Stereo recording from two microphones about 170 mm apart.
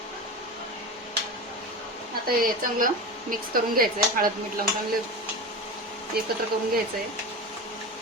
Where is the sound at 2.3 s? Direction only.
55° right (ahead or behind).